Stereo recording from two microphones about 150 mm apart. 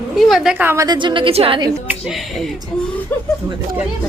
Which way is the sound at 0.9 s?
35° right (ahead or behind).